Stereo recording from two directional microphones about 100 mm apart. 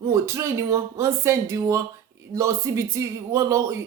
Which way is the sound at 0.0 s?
30° right (ahead or behind).